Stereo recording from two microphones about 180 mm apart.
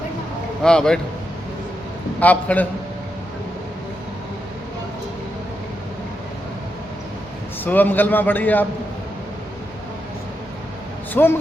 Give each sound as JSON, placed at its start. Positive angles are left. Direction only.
{"t": 0.6, "sound": "a man's voice", "side_deg": 5}
{"t": 2.2, "sound": "a man's voice", "side_deg": 10}
{"t": 7.6, "sound": "a man's voice", "side_deg": 10}
{"t": 11.1, "sound": "speech", "side_deg": 10}